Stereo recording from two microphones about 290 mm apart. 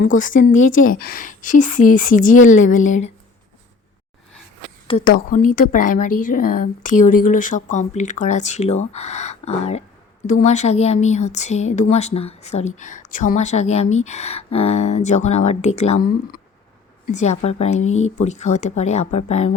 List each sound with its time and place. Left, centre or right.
0.0 s a woman's voice: left
4.9 s a woman's voice: left
7.0 s speech: left
7.3 s a woman's voice: left
17.8 s speech: left
18.2 s a woman's voice: left